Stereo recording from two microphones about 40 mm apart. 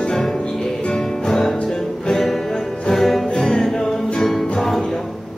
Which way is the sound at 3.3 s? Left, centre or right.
Centre.